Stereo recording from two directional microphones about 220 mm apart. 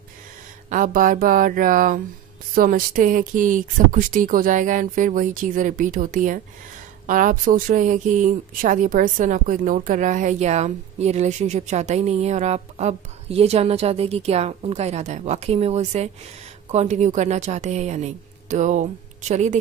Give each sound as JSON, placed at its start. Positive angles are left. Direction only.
{"t": 0.7, "sound": "a woman's voice", "side_deg": -35}